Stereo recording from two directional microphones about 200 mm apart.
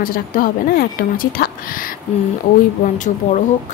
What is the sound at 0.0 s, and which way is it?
Speech, 45° left (ahead or behind).